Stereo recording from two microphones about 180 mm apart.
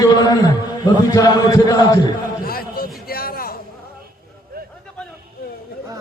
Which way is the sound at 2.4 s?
55° left (ahead or behind).